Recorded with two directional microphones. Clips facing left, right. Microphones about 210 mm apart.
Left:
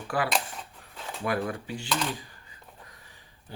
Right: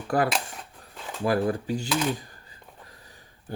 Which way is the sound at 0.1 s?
45° right (ahead or behind).